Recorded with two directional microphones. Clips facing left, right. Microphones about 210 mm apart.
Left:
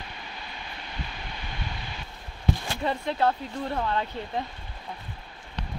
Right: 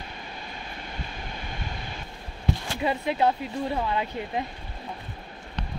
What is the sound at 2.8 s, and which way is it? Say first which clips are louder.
Speech: right 3 dB; 10° right (ahead or behind).